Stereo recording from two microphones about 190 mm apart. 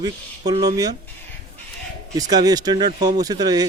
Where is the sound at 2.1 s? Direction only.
20° right (ahead or behind).